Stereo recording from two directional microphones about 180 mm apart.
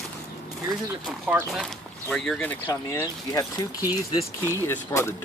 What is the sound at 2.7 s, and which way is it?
Speech, 20° left (ahead or behind).